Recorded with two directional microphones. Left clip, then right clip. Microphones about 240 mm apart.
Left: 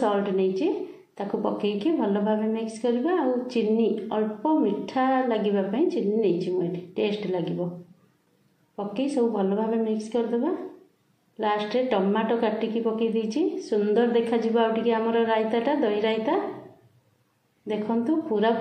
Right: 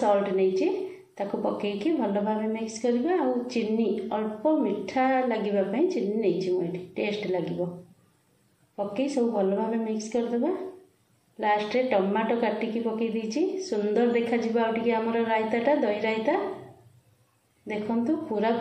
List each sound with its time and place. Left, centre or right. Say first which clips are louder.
0.0 s a woman's voice: right 1 dB; left
8.7 s a woman's voice: left 1 dB; centre
17.6 s a woman's voice: left 2 dB; centre